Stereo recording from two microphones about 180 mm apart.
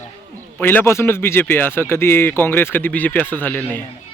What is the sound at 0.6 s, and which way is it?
A man's voice, 10° left (ahead or behind).